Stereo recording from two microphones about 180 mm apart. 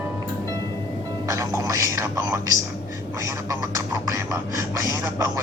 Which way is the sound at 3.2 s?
15° right (ahead or behind).